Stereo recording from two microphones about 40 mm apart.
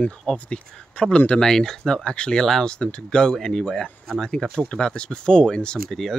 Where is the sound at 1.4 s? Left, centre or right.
Centre.